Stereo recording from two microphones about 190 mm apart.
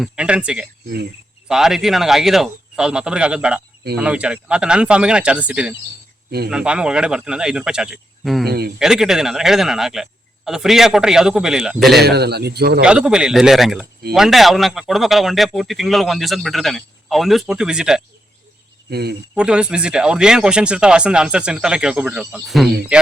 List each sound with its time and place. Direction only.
0.0 s speech: 5° right (ahead or behind)
8.4 s speech: 55° right (ahead or behind)
8.8 s speech: centre (ahead or behind)
11.9 s speech: 60° right (ahead or behind)
12.8 s speech: 5° right (ahead or behind)
18.9 s speech: 55° right (ahead or behind)
19.3 s speech: 5° right (ahead or behind)